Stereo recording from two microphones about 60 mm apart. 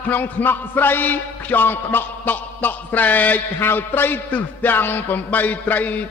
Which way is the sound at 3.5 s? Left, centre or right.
Left.